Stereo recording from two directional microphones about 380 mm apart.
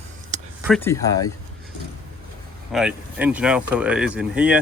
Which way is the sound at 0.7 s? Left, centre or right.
Centre.